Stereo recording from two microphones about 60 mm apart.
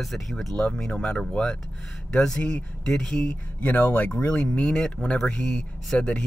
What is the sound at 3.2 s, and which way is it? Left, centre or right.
Speech, left.